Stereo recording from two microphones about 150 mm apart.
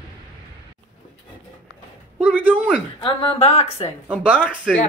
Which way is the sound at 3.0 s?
35° left (ahead or behind).